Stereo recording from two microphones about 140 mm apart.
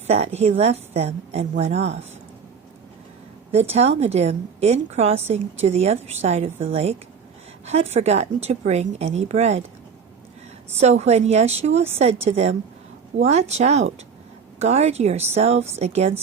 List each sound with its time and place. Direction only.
0.1 s a woman's voice: 50° right (ahead or behind)
3.5 s a woman's voice: 50° right (ahead or behind)
10.8 s a woman's voice: 50° right (ahead or behind)